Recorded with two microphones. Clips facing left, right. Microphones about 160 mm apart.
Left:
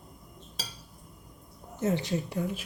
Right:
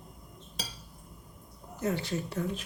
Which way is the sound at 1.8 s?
20° left (ahead or behind).